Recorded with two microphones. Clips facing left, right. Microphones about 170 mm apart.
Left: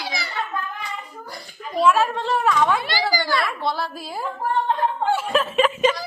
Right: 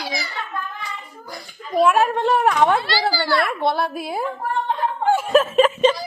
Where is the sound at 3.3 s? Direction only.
55° right (ahead or behind).